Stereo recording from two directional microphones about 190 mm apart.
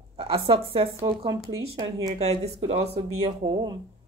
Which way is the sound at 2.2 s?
35° right (ahead or behind).